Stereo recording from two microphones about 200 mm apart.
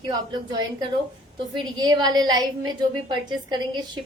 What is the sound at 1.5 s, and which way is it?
A woman's voice, 20° right (ahead or behind).